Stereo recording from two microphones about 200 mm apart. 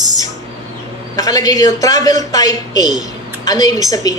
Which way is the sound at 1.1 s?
20° left (ahead or behind).